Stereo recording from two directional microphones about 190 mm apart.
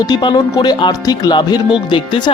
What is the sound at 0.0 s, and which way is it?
Speech, 20° left (ahead or behind).